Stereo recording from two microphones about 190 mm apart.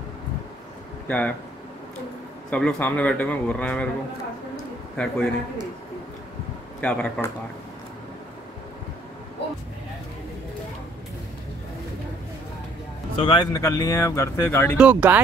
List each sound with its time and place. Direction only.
1.0 s speech: 5° left (ahead or behind)
2.5 s speech: 5° left (ahead or behind)
4.9 s a man's voice: 5° left (ahead or behind)
6.8 s speech: 5° left (ahead or behind)
13.2 s speech: 25° left (ahead or behind)
14.8 s speech: 10° right (ahead or behind)